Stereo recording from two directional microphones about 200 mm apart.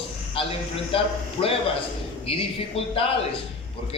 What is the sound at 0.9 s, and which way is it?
Speech, 30° left (ahead or behind).